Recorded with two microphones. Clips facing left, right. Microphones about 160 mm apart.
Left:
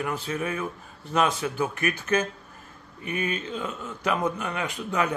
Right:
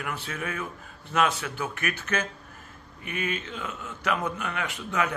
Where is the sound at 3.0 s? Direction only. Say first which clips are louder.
Left 3 dB; 35° left (ahead or behind).